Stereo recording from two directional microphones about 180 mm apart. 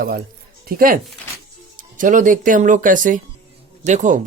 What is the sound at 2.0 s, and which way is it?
Speech, 45° right (ahead or behind).